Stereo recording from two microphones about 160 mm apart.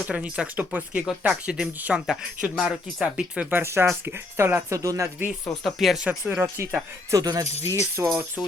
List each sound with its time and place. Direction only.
0.1 s speech: 5° right (ahead or behind)
5.6 s speech: centre (ahead or behind)
6.1 s speech: 10° right (ahead or behind)
7.4 s speech: 40° left (ahead or behind)
8.0 s speech: 15° right (ahead or behind)
8.4 s speech: centre (ahead or behind)